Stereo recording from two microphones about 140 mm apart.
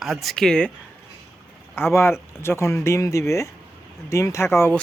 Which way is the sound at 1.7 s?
15° left (ahead or behind).